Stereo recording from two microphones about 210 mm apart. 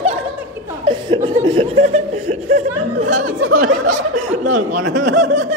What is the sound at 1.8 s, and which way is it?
Chuckle, 30° right (ahead or behind).